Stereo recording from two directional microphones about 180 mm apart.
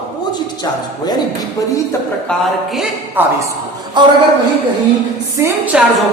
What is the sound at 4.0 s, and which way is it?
Speech, 25° right (ahead or behind).